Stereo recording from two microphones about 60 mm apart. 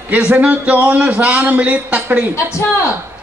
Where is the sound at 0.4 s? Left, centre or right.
Right.